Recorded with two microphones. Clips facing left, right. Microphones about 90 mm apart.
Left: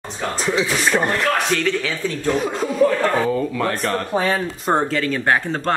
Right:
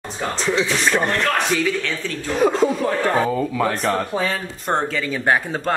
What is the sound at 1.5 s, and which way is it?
Speech, 5° right (ahead or behind).